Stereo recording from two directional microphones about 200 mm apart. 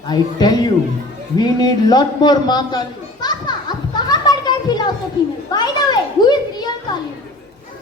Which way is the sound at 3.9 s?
20° left (ahead or behind).